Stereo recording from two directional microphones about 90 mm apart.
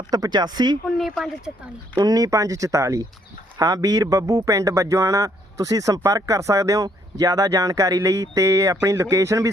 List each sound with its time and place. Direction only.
0.1 s speech: 50° right (ahead or behind)
0.9 s speech: centre (ahead or behind)
2.0 s speech: 45° right (ahead or behind)